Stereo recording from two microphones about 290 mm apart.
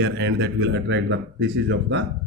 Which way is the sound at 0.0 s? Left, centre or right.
Right.